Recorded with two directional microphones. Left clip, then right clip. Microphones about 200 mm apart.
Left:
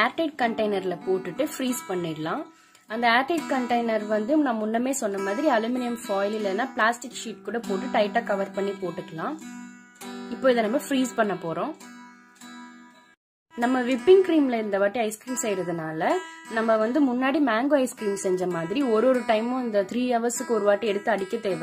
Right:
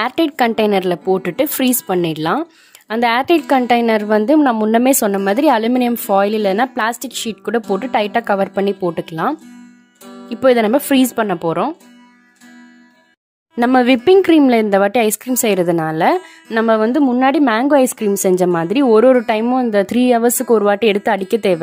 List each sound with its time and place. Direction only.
0.0 s speech: 45° right (ahead or behind)
13.6 s speech: 50° right (ahead or behind)